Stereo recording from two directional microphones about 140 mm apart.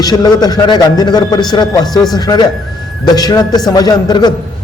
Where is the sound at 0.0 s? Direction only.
30° left (ahead or behind).